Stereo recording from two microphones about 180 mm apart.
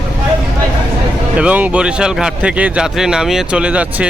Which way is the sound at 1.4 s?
10° right (ahead or behind).